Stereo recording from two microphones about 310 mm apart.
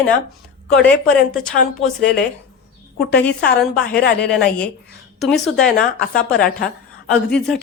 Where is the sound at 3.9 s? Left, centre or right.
Left.